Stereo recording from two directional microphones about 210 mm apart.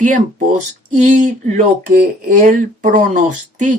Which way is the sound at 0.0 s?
35° right (ahead or behind).